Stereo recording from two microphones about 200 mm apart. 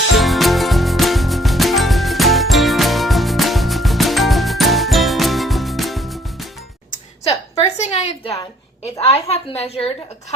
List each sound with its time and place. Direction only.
0.2 s music: centre (ahead or behind)
6.9 s a sound: 30° left (ahead or behind)
9.1 s a woman's voice: 30° left (ahead or behind)